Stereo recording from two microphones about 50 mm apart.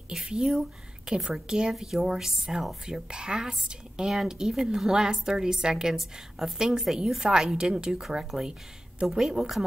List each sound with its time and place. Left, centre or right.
0.2 s a woman's voice: centre